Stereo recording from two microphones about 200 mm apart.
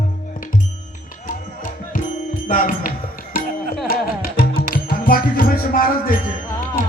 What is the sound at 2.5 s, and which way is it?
Speech, 45° left (ahead or behind).